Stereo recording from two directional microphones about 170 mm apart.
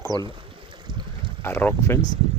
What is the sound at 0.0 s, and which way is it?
Speech, 20° left (ahead or behind).